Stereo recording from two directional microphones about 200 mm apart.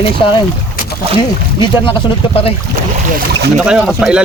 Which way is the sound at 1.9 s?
30° left (ahead or behind).